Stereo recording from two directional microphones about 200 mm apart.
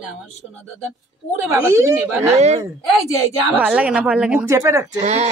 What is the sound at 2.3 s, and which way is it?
Speech, 35° right (ahead or behind).